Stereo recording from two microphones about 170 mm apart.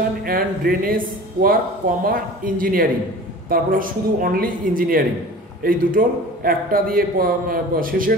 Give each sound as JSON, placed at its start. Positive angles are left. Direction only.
{"t": 0.2, "sound": "a man's voice", "side_deg": -60}